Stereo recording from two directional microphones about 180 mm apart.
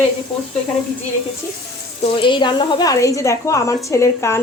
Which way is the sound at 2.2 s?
25° left (ahead or behind).